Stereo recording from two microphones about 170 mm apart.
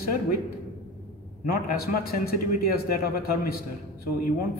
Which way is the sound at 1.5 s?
65° left (ahead or behind).